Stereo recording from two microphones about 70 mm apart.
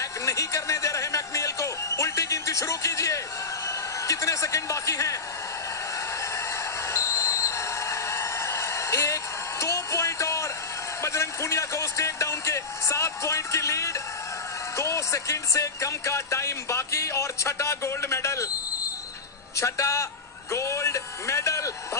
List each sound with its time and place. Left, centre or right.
0.0 s a sound: left
3.7 s a man's voice: left
6.3 s train: left
11.0 s a man's voice: left
19.5 s speech: left